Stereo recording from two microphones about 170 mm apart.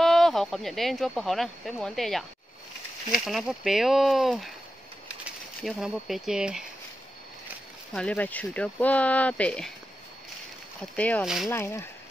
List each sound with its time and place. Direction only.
0.0 s speech: centre (ahead or behind)
3.3 s speech: centre (ahead or behind)
5.6 s speech: centre (ahead or behind)
7.9 s speech: 5° left (ahead or behind)
10.8 s speech: 10° left (ahead or behind)
11.2 s speech: 5° right (ahead or behind)
11.5 s speech: 15° left (ahead or behind)